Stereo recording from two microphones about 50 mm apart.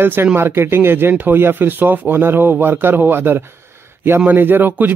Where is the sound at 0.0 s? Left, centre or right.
Right.